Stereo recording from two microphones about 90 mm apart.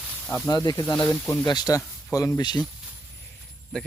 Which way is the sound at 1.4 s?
50° left (ahead or behind).